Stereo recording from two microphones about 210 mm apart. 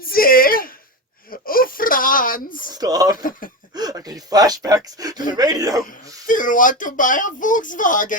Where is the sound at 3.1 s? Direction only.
40° left (ahead or behind).